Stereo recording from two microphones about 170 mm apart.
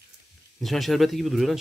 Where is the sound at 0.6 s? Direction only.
Centre (ahead or behind).